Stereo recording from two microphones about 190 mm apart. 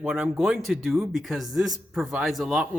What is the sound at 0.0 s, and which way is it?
Speech, 5° right (ahead or behind).